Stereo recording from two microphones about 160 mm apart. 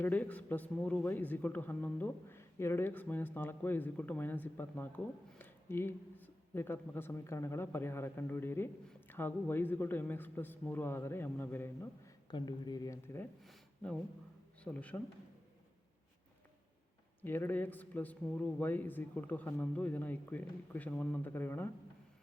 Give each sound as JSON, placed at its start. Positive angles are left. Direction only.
{"t": 0.0, "sound": "a man's voice", "side_deg": 10}
{"t": 12.3, "sound": "speech", "side_deg": 25}
{"t": 13.4, "sound": "a sound", "side_deg": 0}
{"t": 14.6, "sound": "a man's voice", "side_deg": 10}
{"t": 17.2, "sound": "a man's voice", "side_deg": 10}